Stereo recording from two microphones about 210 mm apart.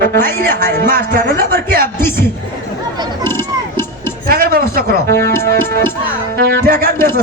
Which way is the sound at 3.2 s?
10° left (ahead or behind).